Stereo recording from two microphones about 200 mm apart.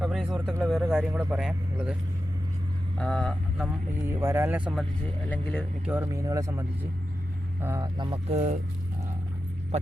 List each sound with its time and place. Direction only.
0.0 s a sound: 5° right (ahead or behind)
0.6 s speech: 5° right (ahead or behind)
3.0 s speech: 5° left (ahead or behind)
4.0 s speech: 10° right (ahead or behind); by 5.6 s 5° left (ahead or behind)
5.8 s speech: 10° right (ahead or behind)
7.9 s speech: 25° right (ahead or behind)